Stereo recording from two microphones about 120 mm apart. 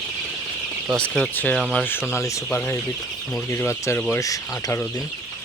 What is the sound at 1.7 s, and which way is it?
Speech, 15° left (ahead or behind).